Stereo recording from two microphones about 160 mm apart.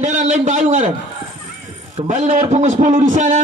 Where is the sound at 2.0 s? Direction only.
50° right (ahead or behind).